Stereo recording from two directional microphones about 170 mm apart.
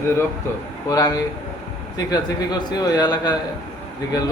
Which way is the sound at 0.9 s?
20° left (ahead or behind).